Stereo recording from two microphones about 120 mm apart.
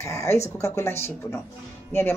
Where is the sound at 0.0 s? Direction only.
25° left (ahead or behind).